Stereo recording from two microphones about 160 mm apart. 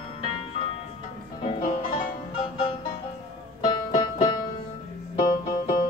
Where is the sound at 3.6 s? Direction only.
30° left (ahead or behind).